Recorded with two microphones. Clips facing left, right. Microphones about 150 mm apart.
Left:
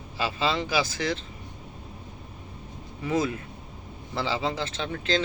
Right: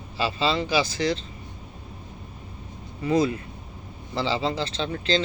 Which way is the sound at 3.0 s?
5° left (ahead or behind).